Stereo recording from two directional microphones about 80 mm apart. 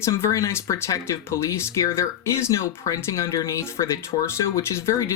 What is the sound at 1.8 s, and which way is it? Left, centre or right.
Speech, left.